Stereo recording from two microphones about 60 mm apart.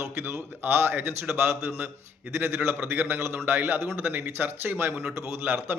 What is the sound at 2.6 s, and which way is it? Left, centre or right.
Speech, right.